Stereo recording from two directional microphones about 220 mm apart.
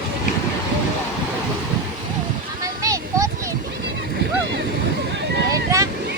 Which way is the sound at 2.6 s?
15° right (ahead or behind).